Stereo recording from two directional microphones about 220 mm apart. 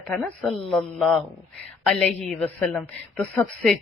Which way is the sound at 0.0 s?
5° left (ahead or behind).